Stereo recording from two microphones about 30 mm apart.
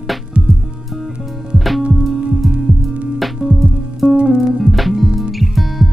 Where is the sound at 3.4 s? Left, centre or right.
Right.